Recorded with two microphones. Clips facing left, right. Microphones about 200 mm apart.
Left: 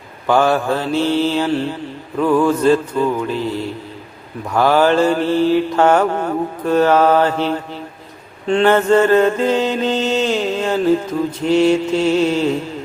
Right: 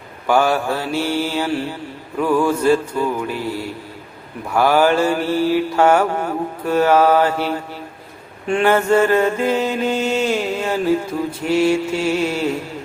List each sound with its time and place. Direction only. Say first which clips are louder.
0.3 s mantra: left 2 dB; 10° right (ahead or behind)